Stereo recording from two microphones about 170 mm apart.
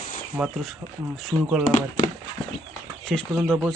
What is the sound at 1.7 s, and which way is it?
Speech, 50° left (ahead or behind).